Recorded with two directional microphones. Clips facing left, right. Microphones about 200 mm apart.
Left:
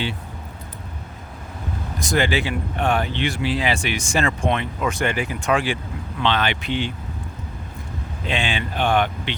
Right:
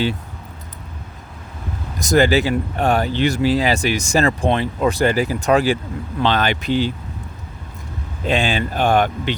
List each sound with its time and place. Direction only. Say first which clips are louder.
2.0 s speech: right 6 dB; 40° right (ahead or behind)
8.3 s speech: right 6 dB; 40° right (ahead or behind)